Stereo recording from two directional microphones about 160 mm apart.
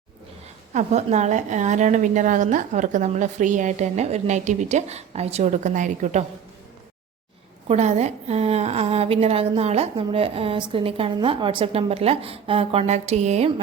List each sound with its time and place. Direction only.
0.7 s a woman's voice: 45° right (ahead or behind)
7.7 s a woman's voice: 45° right (ahead or behind)